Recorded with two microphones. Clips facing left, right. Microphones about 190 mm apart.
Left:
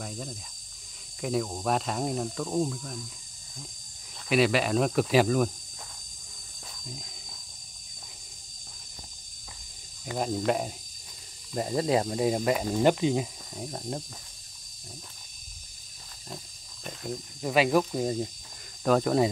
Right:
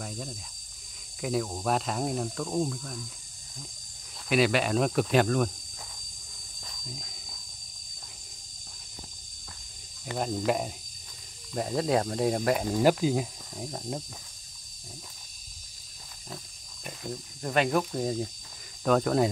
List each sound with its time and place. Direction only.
0.0 s speech: centre (ahead or behind)
4.3 s speech: centre (ahead or behind)
6.6 s hiss: 5° left (ahead or behind)
10.1 s speech: centre (ahead or behind)
16.8 s speech: centre (ahead or behind)